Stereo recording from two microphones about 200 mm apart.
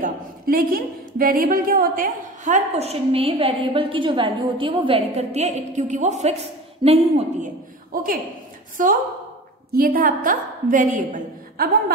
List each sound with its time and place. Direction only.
0.0 s a woman's voice: 45° right (ahead or behind); by 7.2 s 30° right (ahead or behind)
7.9 s a woman's voice: 45° right (ahead or behind)